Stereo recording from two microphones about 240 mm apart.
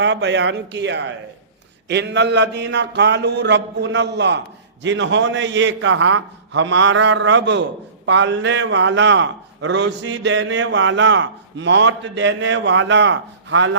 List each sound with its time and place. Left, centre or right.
0.0 s a man's voice: right